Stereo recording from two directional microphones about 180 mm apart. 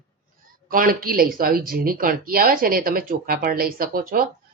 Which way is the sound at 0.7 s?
50° right (ahead or behind).